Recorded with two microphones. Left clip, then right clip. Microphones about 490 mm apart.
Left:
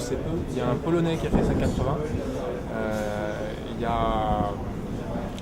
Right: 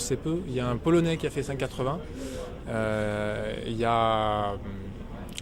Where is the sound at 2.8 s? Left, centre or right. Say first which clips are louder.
Even; right.